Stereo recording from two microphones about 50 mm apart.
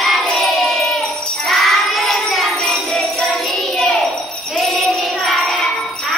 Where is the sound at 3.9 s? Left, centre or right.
Centre.